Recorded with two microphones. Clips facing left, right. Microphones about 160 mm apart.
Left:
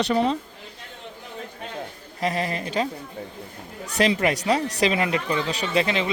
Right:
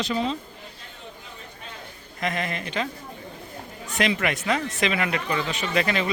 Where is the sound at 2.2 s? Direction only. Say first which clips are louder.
Left 3 dB; 35° left (ahead or behind).